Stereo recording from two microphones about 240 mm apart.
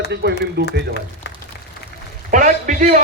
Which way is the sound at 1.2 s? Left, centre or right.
Left.